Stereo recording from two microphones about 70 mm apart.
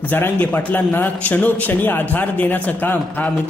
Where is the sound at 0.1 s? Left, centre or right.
Left.